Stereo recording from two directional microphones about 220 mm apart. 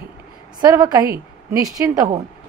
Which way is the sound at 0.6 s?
15° right (ahead or behind).